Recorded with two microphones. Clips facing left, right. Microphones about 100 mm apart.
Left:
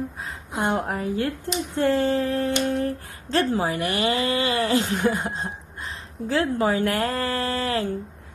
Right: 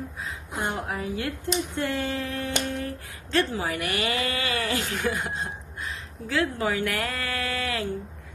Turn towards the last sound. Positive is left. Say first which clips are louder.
# left 5 dB
turn(degrees=35)  # may be behind; listen again after turning